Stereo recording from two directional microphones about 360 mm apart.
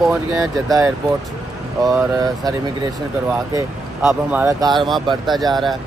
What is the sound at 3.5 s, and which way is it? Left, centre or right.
Speech, centre.